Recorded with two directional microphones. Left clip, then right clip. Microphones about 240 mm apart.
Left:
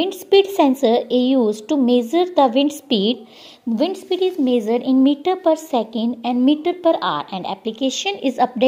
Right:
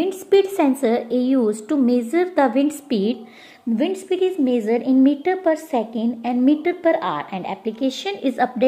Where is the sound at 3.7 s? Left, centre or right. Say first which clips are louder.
Left 1 dB; left.